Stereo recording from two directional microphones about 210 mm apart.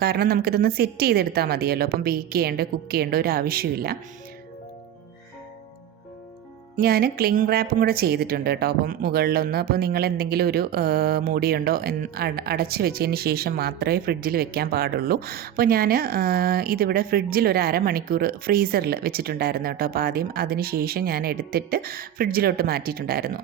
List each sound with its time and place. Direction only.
0.0 s a woman's voice: 45° right (ahead or behind)
6.7 s a woman's voice: 45° right (ahead or behind)